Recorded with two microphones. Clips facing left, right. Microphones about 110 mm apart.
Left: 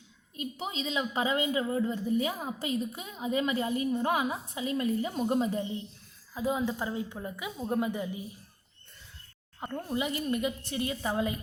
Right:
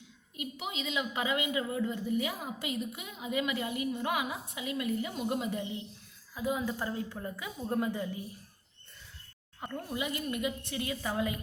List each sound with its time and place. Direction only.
0.3 s a woman's voice: 35° left (ahead or behind); by 8.2 s 20° left (ahead or behind)
9.6 s a woman's voice: 25° left (ahead or behind)